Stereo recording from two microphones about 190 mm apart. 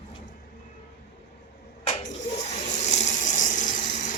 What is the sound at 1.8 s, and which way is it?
Water, 40° left (ahead or behind).